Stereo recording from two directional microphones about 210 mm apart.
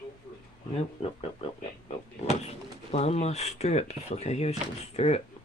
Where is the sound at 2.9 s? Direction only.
30° left (ahead or behind).